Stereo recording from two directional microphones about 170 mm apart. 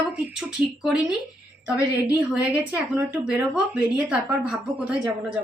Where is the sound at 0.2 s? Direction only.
5° right (ahead or behind).